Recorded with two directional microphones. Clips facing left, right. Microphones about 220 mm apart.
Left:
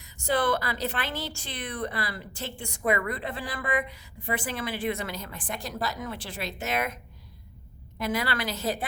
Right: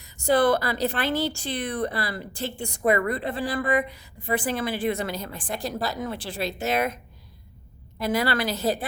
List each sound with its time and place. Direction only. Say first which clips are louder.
0.0 s a woman's voice: right 6 dB; 35° right (ahead or behind)